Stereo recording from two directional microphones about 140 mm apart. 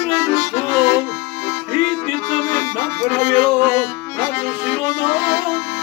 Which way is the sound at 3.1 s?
10° left (ahead or behind).